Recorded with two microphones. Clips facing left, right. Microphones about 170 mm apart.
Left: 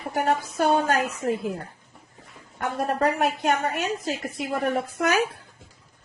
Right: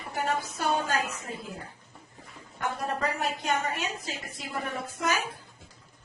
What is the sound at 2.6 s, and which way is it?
A woman's voice, 60° left (ahead or behind).